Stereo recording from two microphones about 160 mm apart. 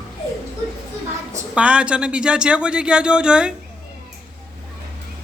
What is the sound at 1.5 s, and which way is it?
A man's voice, 5° right (ahead or behind).